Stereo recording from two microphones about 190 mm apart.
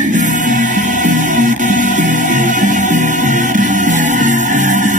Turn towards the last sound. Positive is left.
turn(degrees=-40)  # may be behind; listen again after turning